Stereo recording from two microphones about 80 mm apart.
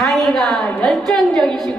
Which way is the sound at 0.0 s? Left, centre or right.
Centre.